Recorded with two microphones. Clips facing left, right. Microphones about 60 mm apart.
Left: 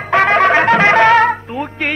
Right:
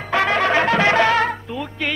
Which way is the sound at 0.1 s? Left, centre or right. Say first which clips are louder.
Left 6 dB; left.